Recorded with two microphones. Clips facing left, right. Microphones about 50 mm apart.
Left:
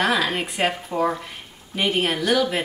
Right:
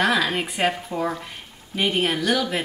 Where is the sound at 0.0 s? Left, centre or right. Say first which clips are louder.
Even; centre.